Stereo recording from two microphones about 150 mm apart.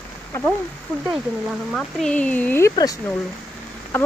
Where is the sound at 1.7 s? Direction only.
5° left (ahead or behind).